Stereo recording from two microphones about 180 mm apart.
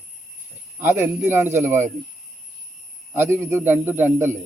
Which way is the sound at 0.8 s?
15° right (ahead or behind).